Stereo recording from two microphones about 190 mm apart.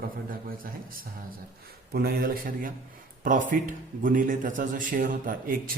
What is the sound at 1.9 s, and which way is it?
Speech, 50° right (ahead or behind).